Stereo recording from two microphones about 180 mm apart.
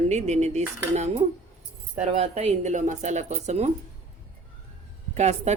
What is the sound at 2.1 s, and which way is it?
Cutlery, 35° right (ahead or behind).